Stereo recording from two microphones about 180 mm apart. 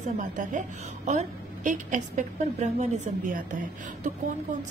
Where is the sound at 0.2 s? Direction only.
45° right (ahead or behind).